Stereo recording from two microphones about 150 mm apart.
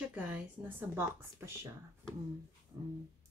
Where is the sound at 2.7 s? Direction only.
25° right (ahead or behind).